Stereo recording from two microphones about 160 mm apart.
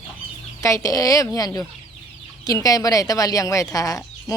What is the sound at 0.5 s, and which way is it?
Speech, 20° left (ahead or behind).